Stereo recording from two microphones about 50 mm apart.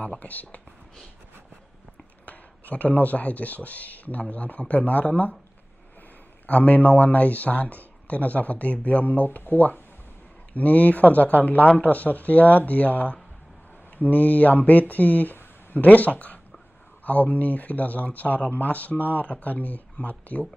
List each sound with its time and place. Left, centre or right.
0.2 s speech: left
2.2 s speech: left
6.4 s speech: left